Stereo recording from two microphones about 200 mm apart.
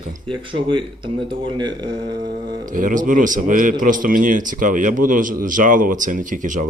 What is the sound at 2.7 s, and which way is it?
Speech, 40° right (ahead or behind).